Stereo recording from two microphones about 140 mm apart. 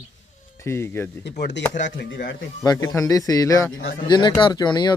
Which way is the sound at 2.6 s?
25° left (ahead or behind).